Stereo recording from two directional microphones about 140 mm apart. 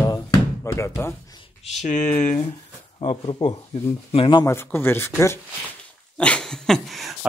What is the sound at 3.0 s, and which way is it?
Speech, 40° left (ahead or behind).